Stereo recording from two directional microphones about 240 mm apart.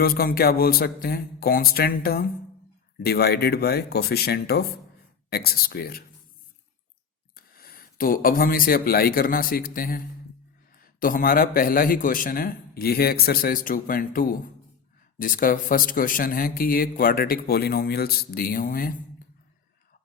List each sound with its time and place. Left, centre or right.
0.0 s speech: left
7.3 s speech: left